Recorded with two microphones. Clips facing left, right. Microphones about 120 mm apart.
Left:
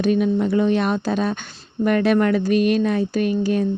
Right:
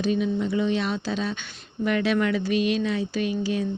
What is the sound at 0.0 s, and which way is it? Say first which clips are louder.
A woman's voice: left 6 dB; 55° left (ahead or behind).